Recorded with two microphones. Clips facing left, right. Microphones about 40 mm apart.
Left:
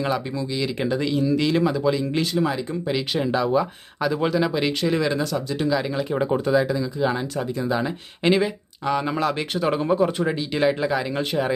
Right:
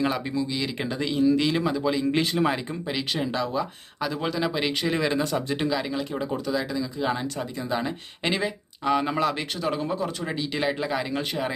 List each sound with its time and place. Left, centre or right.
0.0 s speech: centre
2.1 s speech: right
2.8 s speech: centre
5.2 s speech: right
6.1 s speech: left
6.6 s speech: centre
7.0 s speech: centre
9.6 s speech: centre